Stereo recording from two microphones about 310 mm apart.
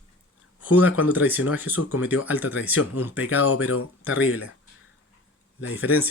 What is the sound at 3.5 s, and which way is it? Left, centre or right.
Speech, left.